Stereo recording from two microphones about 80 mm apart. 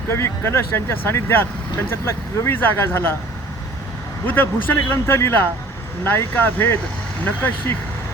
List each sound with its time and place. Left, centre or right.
0.1 s speech: left
4.3 s speech: left